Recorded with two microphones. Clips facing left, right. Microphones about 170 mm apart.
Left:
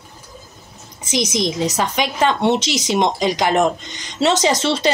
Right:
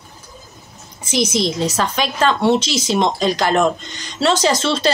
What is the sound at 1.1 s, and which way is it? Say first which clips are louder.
Speech: right 1 dB; 15° left (ahead or behind).